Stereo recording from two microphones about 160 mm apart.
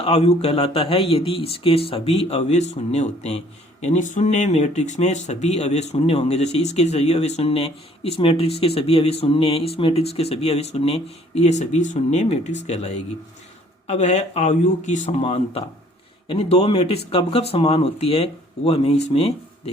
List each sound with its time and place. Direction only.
0.0 s speech: 40° left (ahead or behind)